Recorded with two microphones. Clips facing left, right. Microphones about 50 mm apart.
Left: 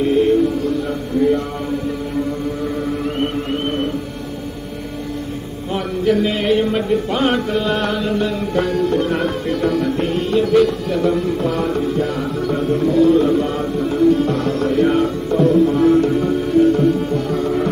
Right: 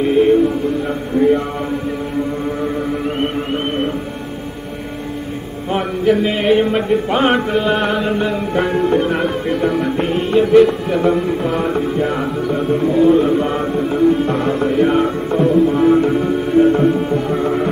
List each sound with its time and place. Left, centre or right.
0.0 s music: right
0.8 s a sound: right
6.0 s music: centre